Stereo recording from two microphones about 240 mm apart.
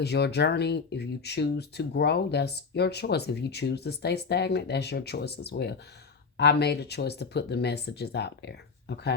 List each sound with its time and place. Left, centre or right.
0.0 s speech: left